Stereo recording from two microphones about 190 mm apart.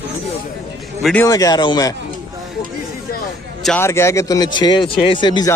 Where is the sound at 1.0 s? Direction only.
5° left (ahead or behind).